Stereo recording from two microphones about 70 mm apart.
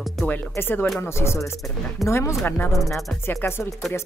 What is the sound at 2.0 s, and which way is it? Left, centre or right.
Music, left.